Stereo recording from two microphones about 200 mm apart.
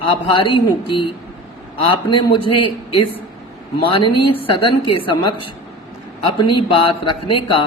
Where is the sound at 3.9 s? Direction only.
25° left (ahead or behind).